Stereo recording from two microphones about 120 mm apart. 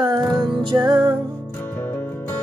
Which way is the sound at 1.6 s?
15° left (ahead or behind).